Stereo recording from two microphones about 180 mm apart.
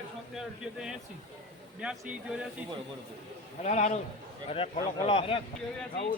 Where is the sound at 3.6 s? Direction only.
40° left (ahead or behind).